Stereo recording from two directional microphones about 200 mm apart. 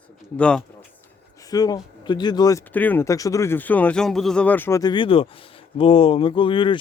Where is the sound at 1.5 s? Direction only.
20° left (ahead or behind).